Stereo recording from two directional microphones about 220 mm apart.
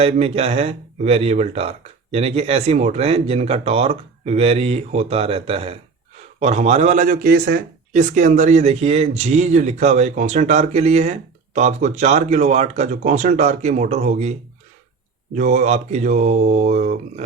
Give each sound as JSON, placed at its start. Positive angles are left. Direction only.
{"t": 0.0, "sound": "speech", "side_deg": -30}
{"t": 15.4, "sound": "speech", "side_deg": -35}